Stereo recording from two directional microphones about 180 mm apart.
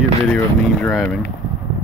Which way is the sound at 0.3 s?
Centre (ahead or behind).